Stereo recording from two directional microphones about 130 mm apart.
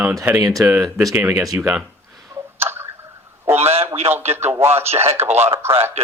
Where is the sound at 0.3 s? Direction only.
10° right (ahead or behind).